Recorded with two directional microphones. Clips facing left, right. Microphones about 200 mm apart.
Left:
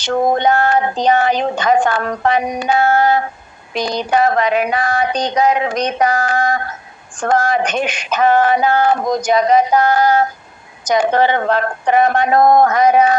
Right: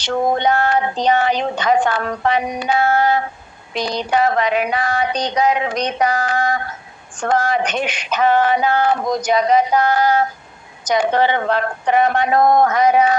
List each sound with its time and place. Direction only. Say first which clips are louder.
0.0 s speech: left 3 dB; 45° left (ahead or behind)